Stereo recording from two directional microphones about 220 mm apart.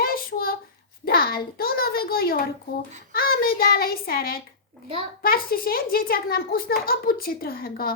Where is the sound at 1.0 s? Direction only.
45° left (ahead or behind).